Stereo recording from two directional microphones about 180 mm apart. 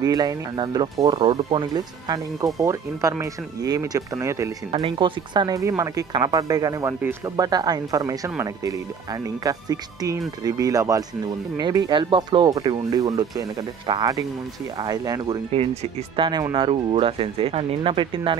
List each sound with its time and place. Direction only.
0.0 s speech: 20° right (ahead or behind)
4.6 s speech: 35° right (ahead or behind)
15.5 s speech: 35° right (ahead or behind)